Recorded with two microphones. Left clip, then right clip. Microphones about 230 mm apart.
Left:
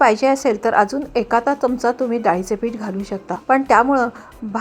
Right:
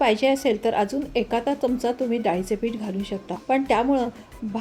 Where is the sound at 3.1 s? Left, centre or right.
Left.